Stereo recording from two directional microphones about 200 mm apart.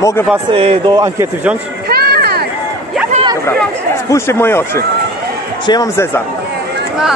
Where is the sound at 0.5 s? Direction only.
25° right (ahead or behind); by 1.6 s 10° right (ahead or behind).